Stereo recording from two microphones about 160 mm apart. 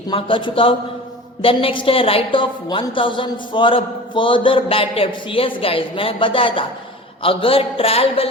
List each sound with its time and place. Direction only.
0.1 s a woman's voice: 30° left (ahead or behind)